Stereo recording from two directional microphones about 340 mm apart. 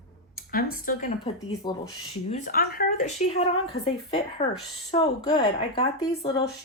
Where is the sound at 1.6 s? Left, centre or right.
Centre.